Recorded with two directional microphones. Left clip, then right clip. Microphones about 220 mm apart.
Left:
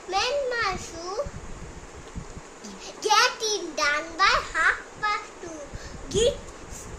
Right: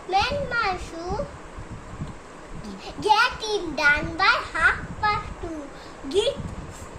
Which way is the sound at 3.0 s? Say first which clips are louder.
Right 1 dB; 20° left (ahead or behind).